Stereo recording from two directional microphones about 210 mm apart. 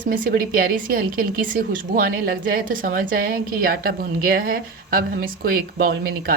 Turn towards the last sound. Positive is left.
turn(degrees=-45)  # may be behind; listen again after turning